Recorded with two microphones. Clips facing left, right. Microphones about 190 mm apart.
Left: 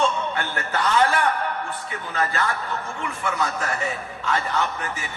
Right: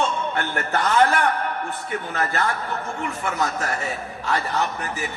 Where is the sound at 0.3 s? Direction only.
45° right (ahead or behind).